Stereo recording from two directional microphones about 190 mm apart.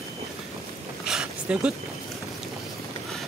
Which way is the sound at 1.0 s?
5° right (ahead or behind).